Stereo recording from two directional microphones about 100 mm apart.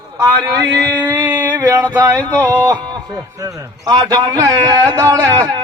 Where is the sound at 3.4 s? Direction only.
40° right (ahead or behind).